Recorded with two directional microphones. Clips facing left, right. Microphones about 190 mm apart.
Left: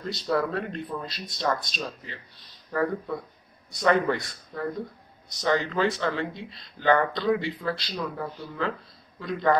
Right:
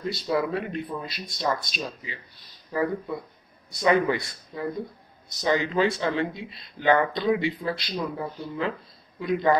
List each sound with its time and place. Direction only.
0.0 s speech: 10° right (ahead or behind)